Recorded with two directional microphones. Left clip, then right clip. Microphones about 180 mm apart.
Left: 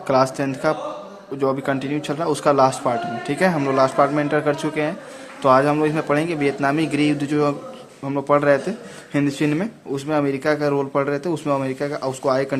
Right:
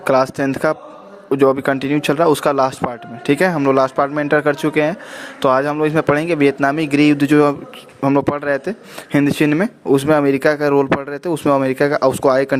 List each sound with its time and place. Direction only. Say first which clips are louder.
0.0 s a man's voice: right 3 dB; 45° right (ahead or behind)